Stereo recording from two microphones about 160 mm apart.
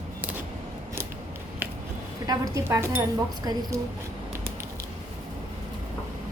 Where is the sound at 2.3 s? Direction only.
20° right (ahead or behind).